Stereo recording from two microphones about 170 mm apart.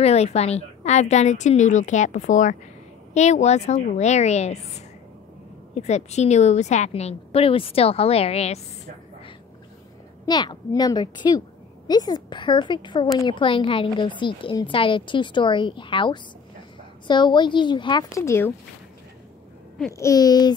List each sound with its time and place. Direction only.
0.0 s a woman's voice: 40° left (ahead or behind)
10.2 s a woman's voice: 25° left (ahead or behind)
19.9 s a woman's voice: 20° left (ahead or behind)